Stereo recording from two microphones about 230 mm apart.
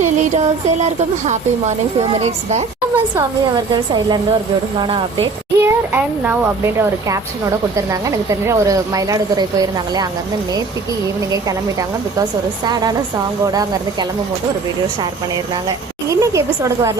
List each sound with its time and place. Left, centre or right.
0.0 s music: right
1.3 s a woman's voice: right
5.5 s speech: centre
8.3 s speech: centre
12.6 s speech: centre
16.0 s speech: centre